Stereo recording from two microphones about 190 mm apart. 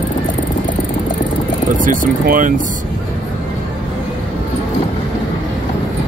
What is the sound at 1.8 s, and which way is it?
Speech, 45° right (ahead or behind).